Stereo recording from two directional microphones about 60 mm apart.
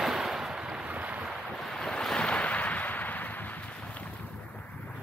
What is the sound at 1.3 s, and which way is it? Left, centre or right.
Waves, centre.